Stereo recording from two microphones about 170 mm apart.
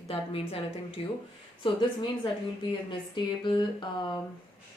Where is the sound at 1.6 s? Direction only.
30° left (ahead or behind).